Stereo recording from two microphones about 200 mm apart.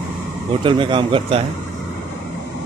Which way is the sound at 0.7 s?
25° right (ahead or behind).